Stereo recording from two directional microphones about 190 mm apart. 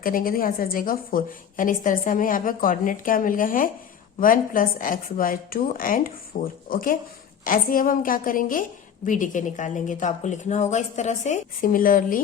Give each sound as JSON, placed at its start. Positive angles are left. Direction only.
{"t": 0.0, "sound": "a woman's voice", "side_deg": 50}